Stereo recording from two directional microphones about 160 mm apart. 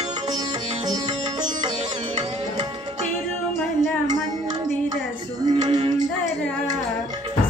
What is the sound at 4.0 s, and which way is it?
Music, 25° right (ahead or behind).